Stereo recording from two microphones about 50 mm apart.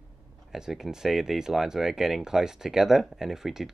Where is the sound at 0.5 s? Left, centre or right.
Centre.